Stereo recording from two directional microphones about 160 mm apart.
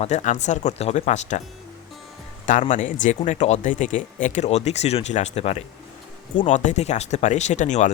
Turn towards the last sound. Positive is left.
turn(degrees=50)  # may be behind; listen again after turning